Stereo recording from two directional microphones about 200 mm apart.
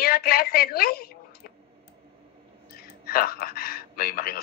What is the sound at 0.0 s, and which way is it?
A man's voice, 50° left (ahead or behind).